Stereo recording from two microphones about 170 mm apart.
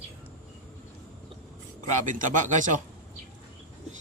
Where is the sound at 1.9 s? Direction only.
50° right (ahead or behind).